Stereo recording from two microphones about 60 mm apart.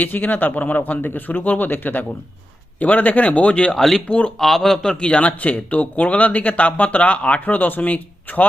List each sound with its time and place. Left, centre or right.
0.0 s speech: left
3.8 s speech: centre; by 8.4 s left